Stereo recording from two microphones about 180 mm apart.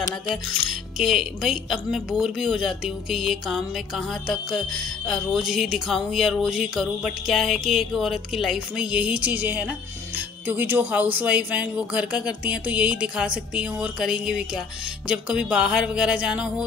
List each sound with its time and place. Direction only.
0.7 s speech: centre (ahead or behind)